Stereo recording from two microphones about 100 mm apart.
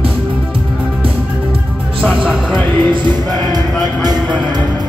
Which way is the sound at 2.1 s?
10° right (ahead or behind).